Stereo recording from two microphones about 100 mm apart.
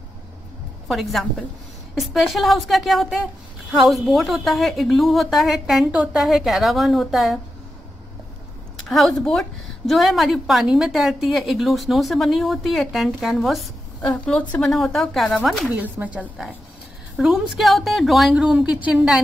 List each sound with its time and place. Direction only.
0.8 s a woman's voice: centre (ahead or behind)
8.8 s a woman's voice: 5° left (ahead or behind)
14.2 s a woman's voice: 10° left (ahead or behind)
15.7 s speech: 15° right (ahead or behind)
17.2 s a woman's voice: 5° right (ahead or behind)